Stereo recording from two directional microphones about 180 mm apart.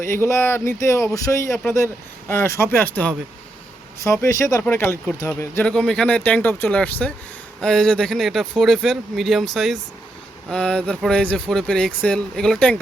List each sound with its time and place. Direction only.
0.0 s speech: 15° left (ahead or behind)